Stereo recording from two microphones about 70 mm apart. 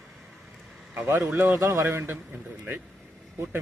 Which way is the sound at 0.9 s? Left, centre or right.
Right.